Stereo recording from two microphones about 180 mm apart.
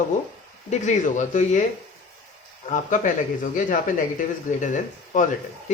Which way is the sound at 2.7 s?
45° left (ahead or behind).